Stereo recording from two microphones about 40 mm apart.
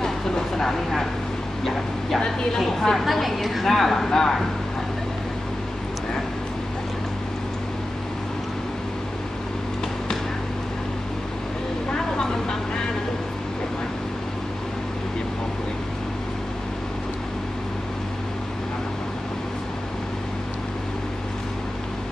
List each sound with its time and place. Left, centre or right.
0.6 s speech: centre
2.0 s a woman's voice: centre
11.9 s vehicle: centre